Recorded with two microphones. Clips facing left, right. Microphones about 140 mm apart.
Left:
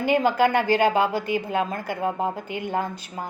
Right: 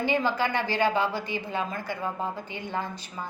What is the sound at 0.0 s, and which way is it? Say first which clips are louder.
A woman's voice: left 6 dB; 50° left (ahead or behind).